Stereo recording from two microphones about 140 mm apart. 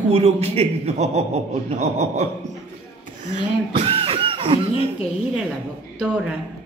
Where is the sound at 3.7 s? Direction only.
40° right (ahead or behind).